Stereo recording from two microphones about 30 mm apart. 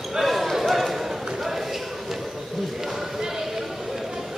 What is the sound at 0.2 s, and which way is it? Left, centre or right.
Basketball bounce, centre.